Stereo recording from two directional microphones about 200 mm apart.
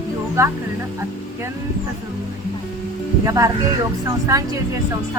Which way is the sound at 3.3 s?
15° right (ahead or behind).